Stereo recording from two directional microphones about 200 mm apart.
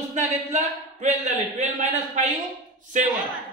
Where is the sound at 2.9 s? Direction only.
35° right (ahead or behind).